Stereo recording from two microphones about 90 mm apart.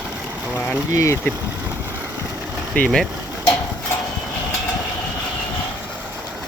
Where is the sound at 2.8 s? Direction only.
15° left (ahead or behind).